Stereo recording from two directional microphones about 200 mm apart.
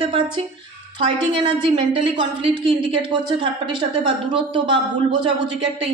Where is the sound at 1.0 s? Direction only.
25° right (ahead or behind).